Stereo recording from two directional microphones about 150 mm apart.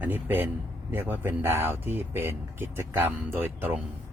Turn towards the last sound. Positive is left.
turn(degrees=-10)  # may be behind; listen again after turning